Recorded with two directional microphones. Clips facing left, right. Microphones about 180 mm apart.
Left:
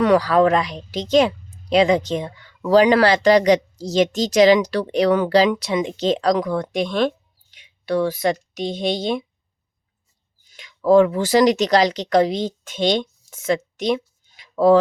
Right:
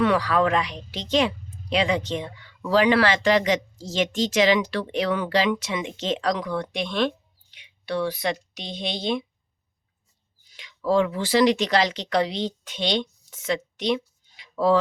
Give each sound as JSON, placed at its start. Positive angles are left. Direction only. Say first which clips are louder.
{"t": 0.0, "sound": "speech", "louder": "left 6 dB", "side_deg": 40}
{"t": 10.5, "sound": "speech", "louder": "left 8 dB", "side_deg": 45}